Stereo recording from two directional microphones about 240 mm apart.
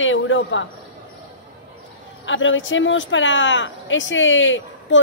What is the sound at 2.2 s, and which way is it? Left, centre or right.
Speech, left.